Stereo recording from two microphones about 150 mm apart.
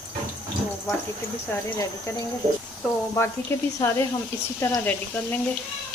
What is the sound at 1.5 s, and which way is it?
Speech, 20° left (ahead or behind).